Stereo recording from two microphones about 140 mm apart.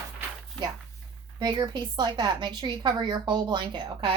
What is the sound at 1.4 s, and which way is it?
A woman's voice, 30° right (ahead or behind).